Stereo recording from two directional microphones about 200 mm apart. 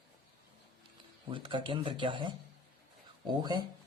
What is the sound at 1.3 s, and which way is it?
Speech, 25° right (ahead or behind).